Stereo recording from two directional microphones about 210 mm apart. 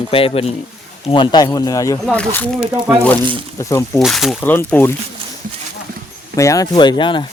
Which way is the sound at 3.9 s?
Centre (ahead or behind).